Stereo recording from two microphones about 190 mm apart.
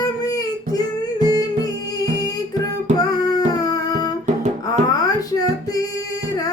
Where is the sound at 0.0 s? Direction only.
20° left (ahead or behind).